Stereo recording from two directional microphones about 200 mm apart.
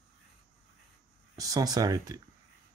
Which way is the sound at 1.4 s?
15° right (ahead or behind).